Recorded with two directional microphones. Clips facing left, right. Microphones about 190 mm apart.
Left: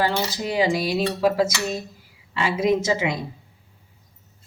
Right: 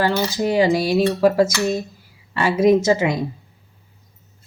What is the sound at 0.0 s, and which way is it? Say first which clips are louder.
A woman's voice: right 4 dB; 50° right (ahead or behind).